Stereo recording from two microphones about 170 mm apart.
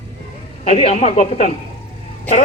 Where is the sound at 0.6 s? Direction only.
40° left (ahead or behind).